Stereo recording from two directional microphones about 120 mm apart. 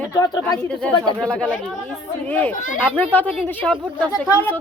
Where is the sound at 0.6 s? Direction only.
5° left (ahead or behind).